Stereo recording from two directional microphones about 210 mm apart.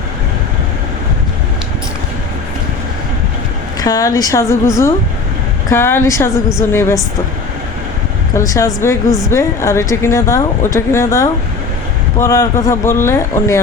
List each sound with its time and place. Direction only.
3.8 s a woman's voice: 15° left (ahead or behind)
5.7 s a woman's voice: 10° left (ahead or behind)
8.4 s a woman's voice: 15° left (ahead or behind)